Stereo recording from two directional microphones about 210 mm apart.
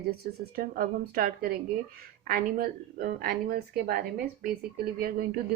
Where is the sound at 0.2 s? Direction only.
45° right (ahead or behind).